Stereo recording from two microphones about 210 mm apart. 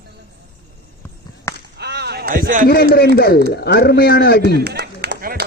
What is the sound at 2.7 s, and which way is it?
A man's voice, 45° left (ahead or behind).